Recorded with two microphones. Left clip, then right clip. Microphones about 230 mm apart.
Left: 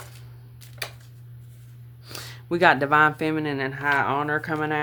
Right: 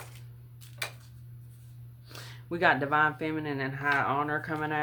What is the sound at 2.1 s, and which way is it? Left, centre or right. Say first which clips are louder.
Speech: left 9 dB; left.